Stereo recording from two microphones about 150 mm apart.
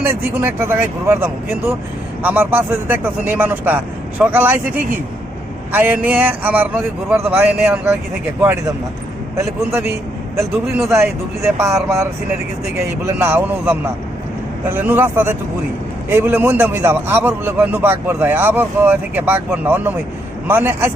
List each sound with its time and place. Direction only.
0.0 s a man's voice: 15° right (ahead or behind)
10.8 s a man's voice: 15° right (ahead or behind)